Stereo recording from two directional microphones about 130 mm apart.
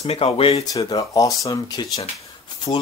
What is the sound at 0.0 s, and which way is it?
Speech, 50° left (ahead or behind).